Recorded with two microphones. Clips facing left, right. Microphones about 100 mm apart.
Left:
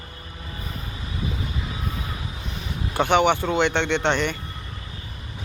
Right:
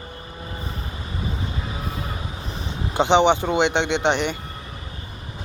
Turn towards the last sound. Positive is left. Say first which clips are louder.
# right 1 dB
turn(degrees=-15)  # may be behind; listen again after turning